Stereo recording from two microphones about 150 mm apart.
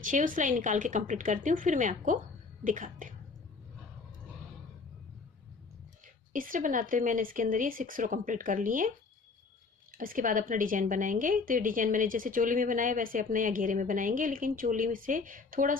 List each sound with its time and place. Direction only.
0.0 s a woman's voice: 60° right (ahead or behind)
6.3 s a woman's voice: 65° right (ahead or behind)
9.9 s a woman's voice: 70° right (ahead or behind)